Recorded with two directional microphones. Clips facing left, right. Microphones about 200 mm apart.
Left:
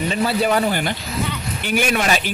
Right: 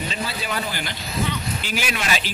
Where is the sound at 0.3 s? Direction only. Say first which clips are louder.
Left 10 dB; 60° left (ahead or behind).